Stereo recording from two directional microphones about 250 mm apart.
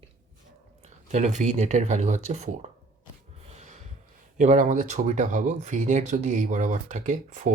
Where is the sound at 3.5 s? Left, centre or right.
Right.